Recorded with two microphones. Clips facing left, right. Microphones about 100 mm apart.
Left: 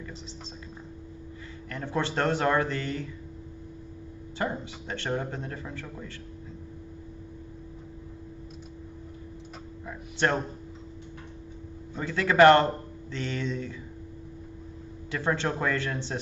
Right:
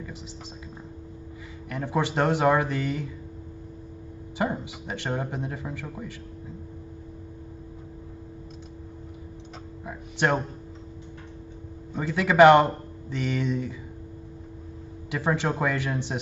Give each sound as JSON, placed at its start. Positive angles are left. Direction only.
{"t": 1.7, "sound": "speech", "side_deg": -15}
{"t": 4.4, "sound": "speech", "side_deg": -15}
{"t": 9.8, "sound": "speech", "side_deg": -15}
{"t": 11.9, "sound": "speech", "side_deg": -15}
{"t": 15.0, "sound": "speech", "side_deg": -15}